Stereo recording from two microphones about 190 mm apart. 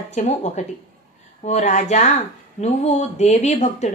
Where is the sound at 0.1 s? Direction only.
35° left (ahead or behind).